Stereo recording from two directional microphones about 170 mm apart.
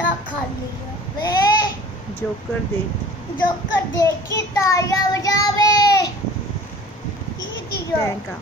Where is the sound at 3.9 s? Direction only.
20° left (ahead or behind).